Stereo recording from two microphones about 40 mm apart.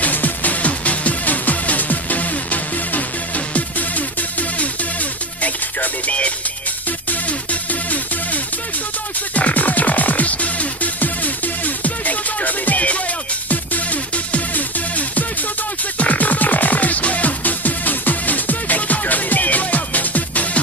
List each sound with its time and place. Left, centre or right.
0.0 s music: left
9.3 s music: left